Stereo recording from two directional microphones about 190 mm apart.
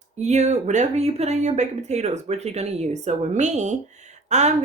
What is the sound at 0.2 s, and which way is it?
Speech, 35° right (ahead or behind).